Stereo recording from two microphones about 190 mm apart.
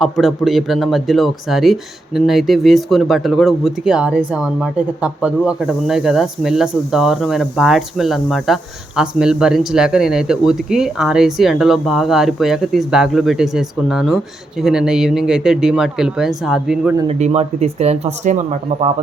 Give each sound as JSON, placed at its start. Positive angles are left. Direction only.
{"t": 0.0, "sound": "speech", "side_deg": 0}
{"t": 17.1, "sound": "speech", "side_deg": -35}